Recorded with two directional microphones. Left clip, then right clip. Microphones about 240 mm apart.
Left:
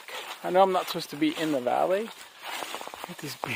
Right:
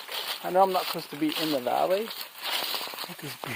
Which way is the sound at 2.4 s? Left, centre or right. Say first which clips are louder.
Right 5 dB; right.